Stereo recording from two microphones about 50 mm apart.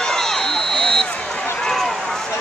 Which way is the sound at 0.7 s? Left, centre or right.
Centre.